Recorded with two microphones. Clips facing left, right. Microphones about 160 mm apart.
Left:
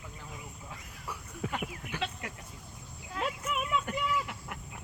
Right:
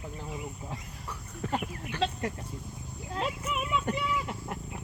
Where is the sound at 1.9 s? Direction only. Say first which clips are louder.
Right 6 dB; 10° left (ahead or behind).